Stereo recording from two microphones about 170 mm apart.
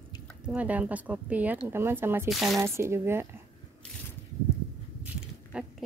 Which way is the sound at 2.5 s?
15° right (ahead or behind).